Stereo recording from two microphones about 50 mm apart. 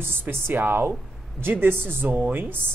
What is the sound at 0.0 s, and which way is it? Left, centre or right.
Speech, right.